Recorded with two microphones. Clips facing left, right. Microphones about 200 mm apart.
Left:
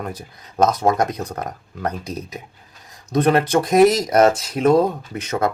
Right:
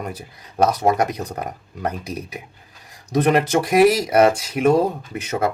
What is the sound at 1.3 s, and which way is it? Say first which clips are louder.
Speech: even; 10° right (ahead or behind).